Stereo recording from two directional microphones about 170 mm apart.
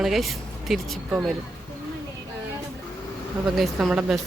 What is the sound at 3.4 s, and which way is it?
Speech, centre (ahead or behind).